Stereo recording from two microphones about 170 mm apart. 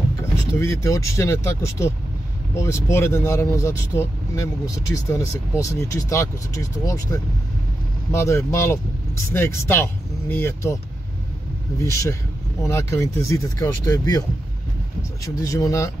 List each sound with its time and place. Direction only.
0.6 s speech: 15° left (ahead or behind)
11.8 s speech: 20° left (ahead or behind)
15.2 s speech: 20° left (ahead or behind)